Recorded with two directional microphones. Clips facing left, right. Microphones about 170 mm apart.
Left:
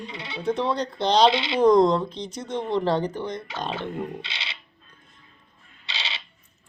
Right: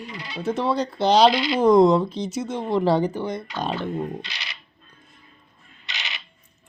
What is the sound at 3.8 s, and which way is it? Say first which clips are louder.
Speech: right 3 dB; 25° left (ahead or behind).